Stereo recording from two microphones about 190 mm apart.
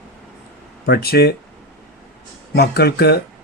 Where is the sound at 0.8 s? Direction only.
55° left (ahead or behind).